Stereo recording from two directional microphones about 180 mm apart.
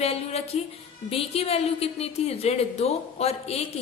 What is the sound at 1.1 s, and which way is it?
A woman's voice, 35° left (ahead or behind).